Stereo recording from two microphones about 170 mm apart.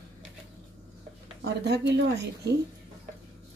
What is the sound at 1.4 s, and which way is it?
A woman's voice, 80° right.